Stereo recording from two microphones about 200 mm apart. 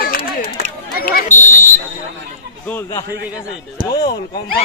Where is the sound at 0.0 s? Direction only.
45° left (ahead or behind).